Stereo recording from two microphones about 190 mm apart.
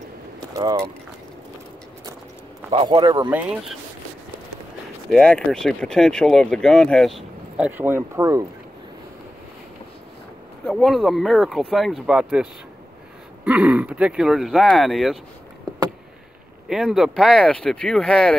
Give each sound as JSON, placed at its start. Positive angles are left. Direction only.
{"t": 0.6, "sound": "speech", "side_deg": -20}
{"t": 2.7, "sound": "speech", "side_deg": -25}
{"t": 3.3, "sound": "speech", "side_deg": -5}
{"t": 5.1, "sound": "speech", "side_deg": 5}
{"t": 10.7, "sound": "speech", "side_deg": 0}
{"t": 15.7, "sound": "a sound", "side_deg": -20}
{"t": 16.6, "sound": "speech", "side_deg": 0}